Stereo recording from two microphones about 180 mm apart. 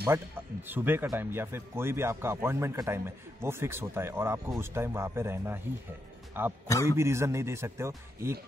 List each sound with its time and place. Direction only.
0.0 s speech: 10° right (ahead or behind)
6.7 s a man's voice: 15° left (ahead or behind)
7.0 s speech: 15° right (ahead or behind)